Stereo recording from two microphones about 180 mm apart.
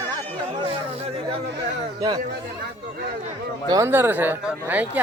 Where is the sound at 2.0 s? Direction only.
20° right (ahead or behind).